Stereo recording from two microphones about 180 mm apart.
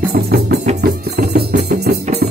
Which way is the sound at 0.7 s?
60° right (ahead or behind).